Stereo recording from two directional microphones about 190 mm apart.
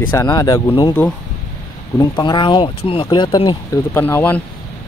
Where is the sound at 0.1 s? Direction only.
20° left (ahead or behind).